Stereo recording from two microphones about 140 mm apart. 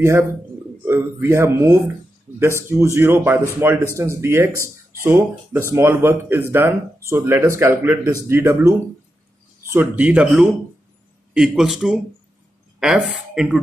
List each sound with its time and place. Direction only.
0.0 s a man's voice: 20° right (ahead or behind)